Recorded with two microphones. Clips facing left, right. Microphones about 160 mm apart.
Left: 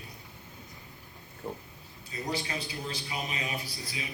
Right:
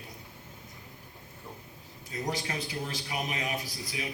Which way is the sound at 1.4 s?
35° left (ahead or behind).